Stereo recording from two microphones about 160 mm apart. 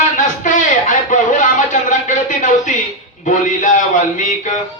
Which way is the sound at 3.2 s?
50° left (ahead or behind).